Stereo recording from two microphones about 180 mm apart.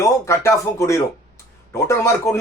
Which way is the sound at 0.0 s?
15° left (ahead or behind).